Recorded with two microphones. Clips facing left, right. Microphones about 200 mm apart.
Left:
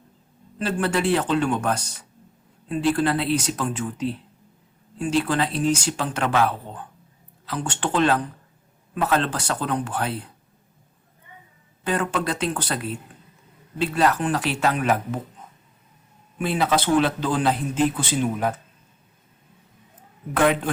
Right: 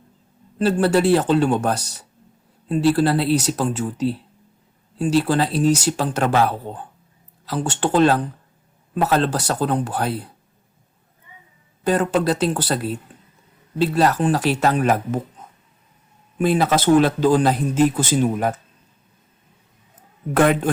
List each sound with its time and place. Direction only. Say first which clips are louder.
0.6 s speech: right 6 dB; 35° right (ahead or behind)
11.8 s speech: right 6 dB; 40° right (ahead or behind)
16.4 s a man's voice: right 4 dB; 45° right (ahead or behind)
20.3 s a man's voice: right 3 dB; 45° right (ahead or behind)